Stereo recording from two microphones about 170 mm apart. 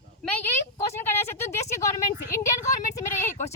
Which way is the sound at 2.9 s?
15° left (ahead or behind).